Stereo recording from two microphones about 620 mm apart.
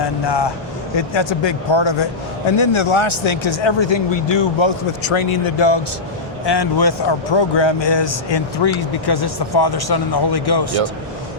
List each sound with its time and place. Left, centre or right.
0.0 s a man's voice: left